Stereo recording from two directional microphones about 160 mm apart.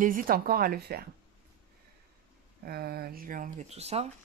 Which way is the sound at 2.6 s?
75° right (ahead or behind).